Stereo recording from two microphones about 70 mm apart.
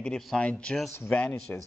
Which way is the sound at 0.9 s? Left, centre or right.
Left.